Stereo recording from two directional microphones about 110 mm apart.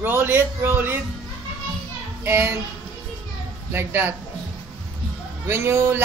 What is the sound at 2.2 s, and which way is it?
Speech, 20° right (ahead or behind).